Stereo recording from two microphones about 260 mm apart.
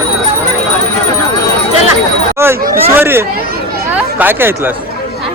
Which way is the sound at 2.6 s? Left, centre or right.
Right.